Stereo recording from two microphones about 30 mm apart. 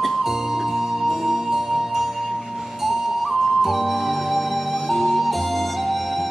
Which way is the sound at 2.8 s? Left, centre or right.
Centre.